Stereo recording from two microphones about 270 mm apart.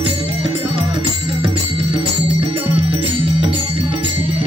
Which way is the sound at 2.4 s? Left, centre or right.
Centre.